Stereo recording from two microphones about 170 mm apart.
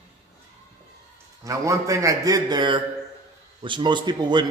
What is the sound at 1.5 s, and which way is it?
A man's voice, 20° right (ahead or behind).